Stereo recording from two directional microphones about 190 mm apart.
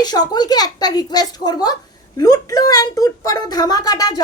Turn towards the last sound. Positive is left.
turn(degrees=20)  # may be behind; listen again after turning